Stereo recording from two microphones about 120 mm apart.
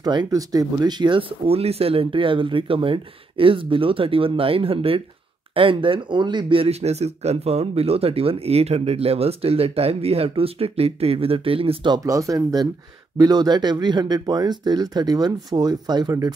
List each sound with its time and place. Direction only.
0.0 s speech: 35° right (ahead or behind)
11.9 s speech: 30° right (ahead or behind)